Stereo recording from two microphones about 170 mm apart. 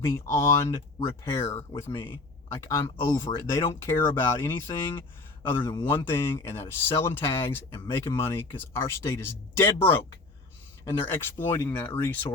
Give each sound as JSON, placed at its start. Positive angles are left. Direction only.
{"t": 0.0, "sound": "speech", "side_deg": 15}
{"t": 11.0, "sound": "speech", "side_deg": 15}